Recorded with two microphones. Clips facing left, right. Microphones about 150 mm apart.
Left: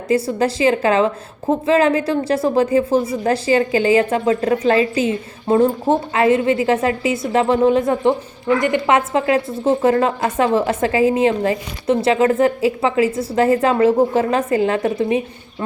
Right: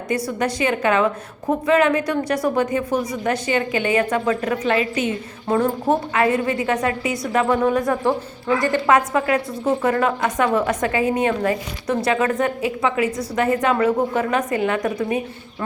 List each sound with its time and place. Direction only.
0.1 s a woman's voice: 30° left (ahead or behind)